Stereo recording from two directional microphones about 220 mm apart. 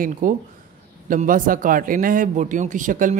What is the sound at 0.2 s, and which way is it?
Speech, 35° right (ahead or behind).